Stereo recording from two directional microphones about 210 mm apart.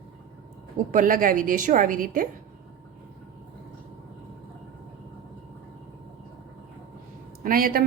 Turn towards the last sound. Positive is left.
turn(degrees=-40)  # may be behind; listen again after turning